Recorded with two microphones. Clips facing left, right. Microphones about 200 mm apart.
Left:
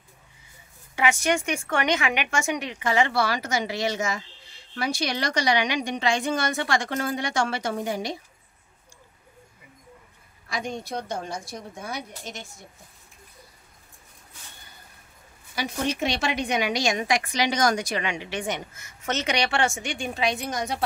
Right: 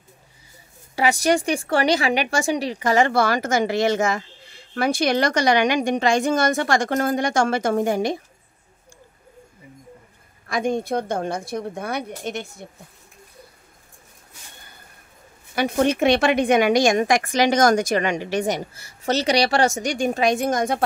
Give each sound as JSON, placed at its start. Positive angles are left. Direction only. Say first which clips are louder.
{"t": 0.9, "sound": "speech", "louder": "right 4 dB", "side_deg": -35}
{"t": 10.5, "sound": "a woman's voice", "louder": "right 9 dB", "side_deg": -50}
{"t": 15.5, "sound": "speech", "louder": "right 8 dB", "side_deg": -55}